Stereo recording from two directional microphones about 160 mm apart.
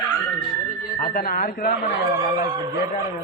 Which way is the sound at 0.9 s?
60° left (ahead or behind).